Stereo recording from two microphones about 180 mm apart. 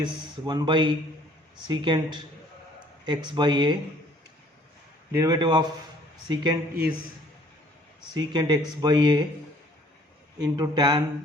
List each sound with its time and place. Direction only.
0.0 s speech: 25° right (ahead or behind)
5.1 s speech: 20° right (ahead or behind)
8.1 s speech: 25° right (ahead or behind)
10.6 s speech: 25° right (ahead or behind)